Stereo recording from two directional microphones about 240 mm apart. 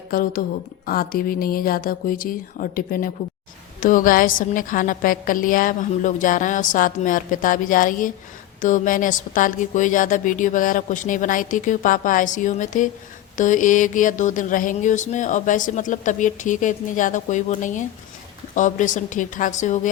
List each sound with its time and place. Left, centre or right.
0.1 s mantra: left